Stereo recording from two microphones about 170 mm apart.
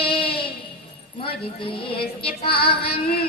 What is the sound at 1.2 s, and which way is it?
A woman's voice, 30° left (ahead or behind).